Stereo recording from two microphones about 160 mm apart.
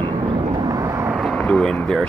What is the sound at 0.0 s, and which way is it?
Vehicle, 30° right (ahead or behind).